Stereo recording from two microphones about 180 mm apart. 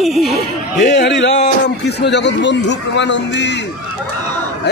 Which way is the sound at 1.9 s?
70° left (ahead or behind).